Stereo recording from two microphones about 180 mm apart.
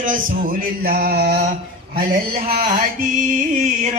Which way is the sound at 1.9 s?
50° right (ahead or behind).